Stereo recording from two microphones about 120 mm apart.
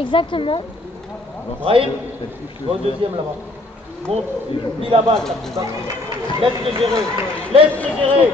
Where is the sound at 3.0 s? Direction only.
50° right (ahead or behind).